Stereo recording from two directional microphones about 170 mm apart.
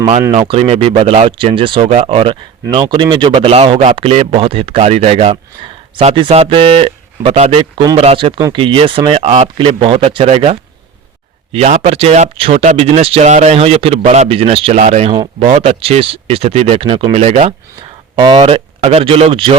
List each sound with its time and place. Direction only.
0.4 s speech: 35° right (ahead or behind)